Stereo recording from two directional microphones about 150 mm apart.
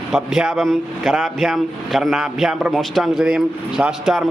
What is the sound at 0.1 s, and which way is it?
A man's voice, 5° right (ahead or behind).